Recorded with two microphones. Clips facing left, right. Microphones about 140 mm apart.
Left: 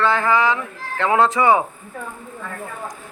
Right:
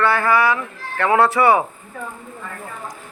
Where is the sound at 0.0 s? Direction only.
15° left (ahead or behind).